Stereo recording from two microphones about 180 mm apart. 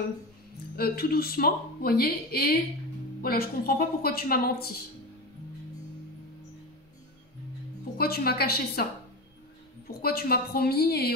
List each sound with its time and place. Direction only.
0.7 s a woman's voice: 55° left (ahead or behind)
8.0 s a woman's voice: 60° left (ahead or behind)
9.8 s a woman's voice: 55° left (ahead or behind)